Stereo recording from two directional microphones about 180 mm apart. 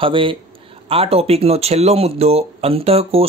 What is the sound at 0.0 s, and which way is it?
Speech, 30° right (ahead or behind).